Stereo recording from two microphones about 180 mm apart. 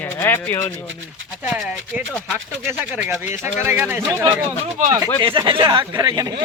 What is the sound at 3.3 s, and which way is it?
Speech, 40° left (ahead or behind).